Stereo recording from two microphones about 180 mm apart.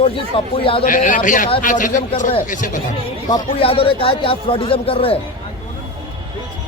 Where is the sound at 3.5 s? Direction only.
30° left (ahead or behind).